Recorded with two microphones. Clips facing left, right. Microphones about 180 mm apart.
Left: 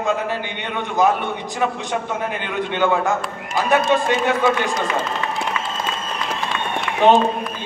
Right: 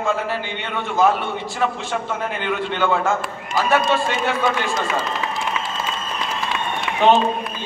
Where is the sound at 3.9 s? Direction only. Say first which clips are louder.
Left 3 dB; 15° left (ahead or behind).